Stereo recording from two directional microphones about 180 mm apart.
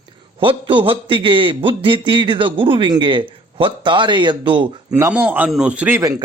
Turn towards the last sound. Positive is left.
turn(degrees=-20)  # may be behind; listen again after turning